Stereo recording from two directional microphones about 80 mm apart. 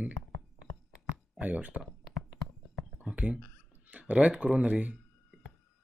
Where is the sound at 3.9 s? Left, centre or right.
Centre.